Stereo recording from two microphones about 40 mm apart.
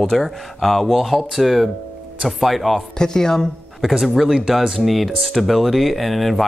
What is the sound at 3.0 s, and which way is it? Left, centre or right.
Speech, centre.